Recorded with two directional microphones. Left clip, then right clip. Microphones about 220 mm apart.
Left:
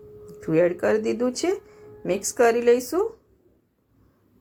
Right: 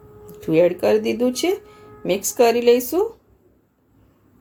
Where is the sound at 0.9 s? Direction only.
35° left (ahead or behind).